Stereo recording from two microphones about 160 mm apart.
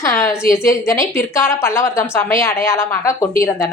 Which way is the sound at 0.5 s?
20° left (ahead or behind).